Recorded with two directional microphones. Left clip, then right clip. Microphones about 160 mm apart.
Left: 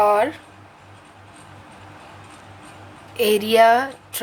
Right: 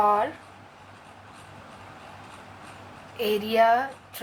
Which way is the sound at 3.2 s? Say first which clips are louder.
Left 7 dB; 50° left (ahead or behind).